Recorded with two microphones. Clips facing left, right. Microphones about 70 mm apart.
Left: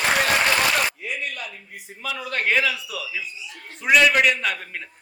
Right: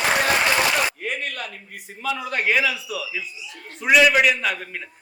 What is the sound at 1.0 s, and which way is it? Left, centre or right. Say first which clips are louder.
Speech: right 2 dB; right.